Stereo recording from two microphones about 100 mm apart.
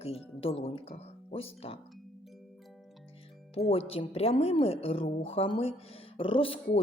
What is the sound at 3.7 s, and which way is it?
Speech, 80° left.